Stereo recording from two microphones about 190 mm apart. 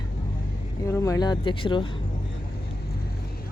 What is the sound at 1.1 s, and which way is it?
Speech, 20° left (ahead or behind).